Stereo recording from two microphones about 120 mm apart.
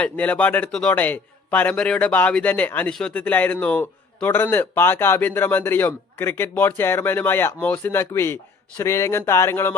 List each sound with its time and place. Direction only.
0.0 s a man's voice: 10° left (ahead or behind)